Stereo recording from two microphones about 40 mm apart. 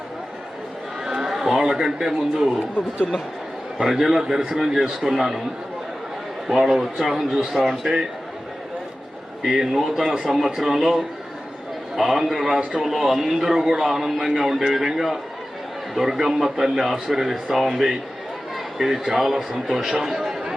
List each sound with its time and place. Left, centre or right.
1.0 s speech: centre
2.8 s speech: left
3.8 s a man's voice: centre
6.5 s a man's voice: centre
9.8 s a man's voice: centre